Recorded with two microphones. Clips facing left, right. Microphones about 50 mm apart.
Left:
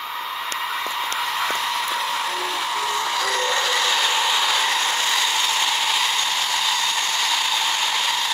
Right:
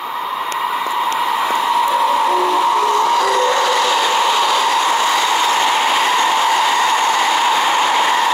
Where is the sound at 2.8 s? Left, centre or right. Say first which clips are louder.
Right 9 dB; right.